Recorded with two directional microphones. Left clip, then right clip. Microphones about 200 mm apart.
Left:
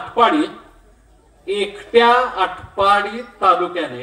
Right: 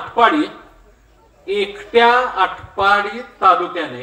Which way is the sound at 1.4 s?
5° left (ahead or behind).